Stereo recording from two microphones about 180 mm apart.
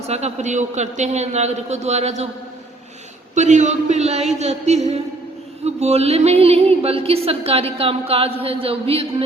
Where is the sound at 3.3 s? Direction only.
40° right (ahead or behind).